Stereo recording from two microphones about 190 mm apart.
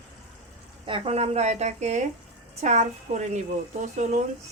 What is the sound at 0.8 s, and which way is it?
Speech, 30° right (ahead or behind).